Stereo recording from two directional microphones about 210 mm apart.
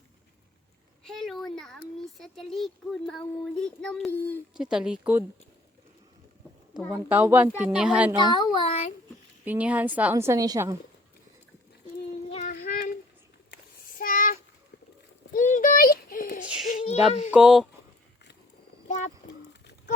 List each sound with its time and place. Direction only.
1.0 s speech: centre (ahead or behind)
4.5 s speech: 5° right (ahead or behind)
6.9 s a woman's voice: 10° right (ahead or behind)
8.2 s a child's voice: 20° left (ahead or behind)
9.4 s a woman's voice: 5° right (ahead or behind)
12.3 s child singing: 35° left (ahead or behind)
14.0 s a sound: 40° left (ahead or behind)
15.3 s child singing: 40° left (ahead or behind)
16.4 s child singing: 5° right (ahead or behind)
16.7 s a sound: 30° left (ahead or behind)
17.3 s speech: 5° right (ahead or behind)